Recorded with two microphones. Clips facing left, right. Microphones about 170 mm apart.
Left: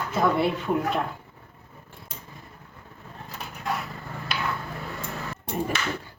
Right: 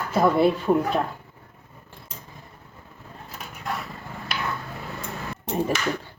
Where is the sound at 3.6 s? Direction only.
Centre (ahead or behind).